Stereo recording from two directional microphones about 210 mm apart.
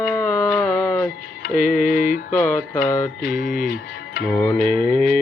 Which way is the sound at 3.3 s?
40° left (ahead or behind).